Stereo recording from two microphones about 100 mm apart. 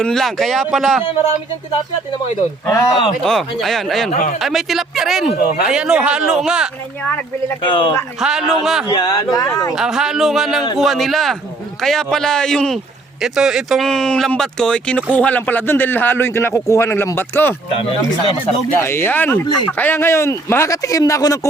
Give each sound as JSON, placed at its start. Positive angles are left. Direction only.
{"t": 0.0, "sound": "speech", "side_deg": 5}
{"t": 2.6, "sound": "speech", "side_deg": 35}
{"t": 3.2, "sound": "speech", "side_deg": 0}
{"t": 7.6, "sound": "a man's voice", "side_deg": 55}
{"t": 8.2, "sound": "speech", "side_deg": -5}
{"t": 8.9, "sound": "speech", "side_deg": 40}
{"t": 9.7, "sound": "speech", "side_deg": -5}
{"t": 13.2, "sound": "speech", "side_deg": -5}
{"t": 18.8, "sound": "speech", "side_deg": 25}